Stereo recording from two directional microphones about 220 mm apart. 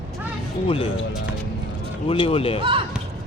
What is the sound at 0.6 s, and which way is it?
Speech, 25° left (ahead or behind).